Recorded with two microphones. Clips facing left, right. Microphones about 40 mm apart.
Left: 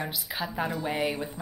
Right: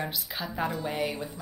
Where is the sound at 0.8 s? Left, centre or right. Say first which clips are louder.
Left 2 dB; centre.